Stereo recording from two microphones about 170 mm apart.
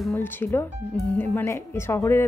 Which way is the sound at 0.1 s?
15° left (ahead or behind).